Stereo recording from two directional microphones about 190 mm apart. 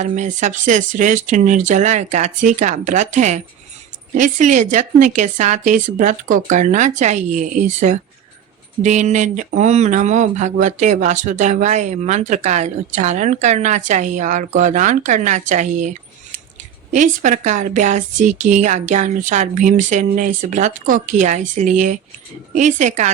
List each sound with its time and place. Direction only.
0.0 s speech: 40° right (ahead or behind)